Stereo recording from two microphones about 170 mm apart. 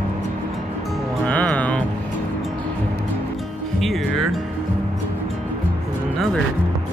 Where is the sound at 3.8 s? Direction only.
Centre (ahead or behind).